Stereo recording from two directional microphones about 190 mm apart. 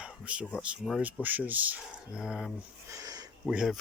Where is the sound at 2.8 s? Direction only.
20° right (ahead or behind).